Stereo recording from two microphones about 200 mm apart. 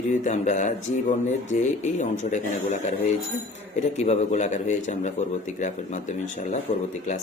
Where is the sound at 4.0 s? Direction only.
35° left (ahead or behind).